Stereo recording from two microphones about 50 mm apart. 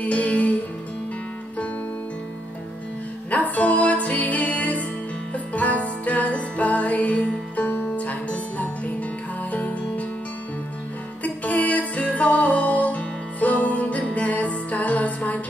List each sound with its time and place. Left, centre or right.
0.0 s music: left
3.3 s music: left
11.2 s music: left